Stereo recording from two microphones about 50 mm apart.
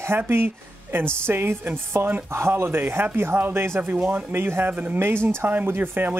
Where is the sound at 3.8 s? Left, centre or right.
Right.